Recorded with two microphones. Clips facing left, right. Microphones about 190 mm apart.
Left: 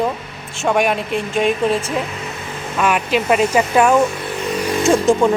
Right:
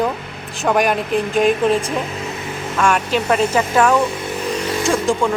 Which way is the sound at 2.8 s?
10° left (ahead or behind).